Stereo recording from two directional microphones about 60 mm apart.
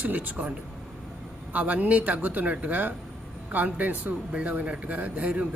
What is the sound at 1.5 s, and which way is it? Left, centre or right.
Speech, right.